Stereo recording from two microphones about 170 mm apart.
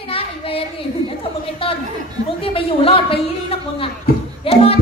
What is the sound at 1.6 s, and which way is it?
A woman's voice, 35° left (ahead or behind).